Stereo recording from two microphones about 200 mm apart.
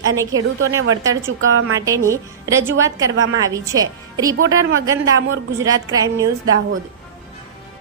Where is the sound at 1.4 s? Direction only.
85° right.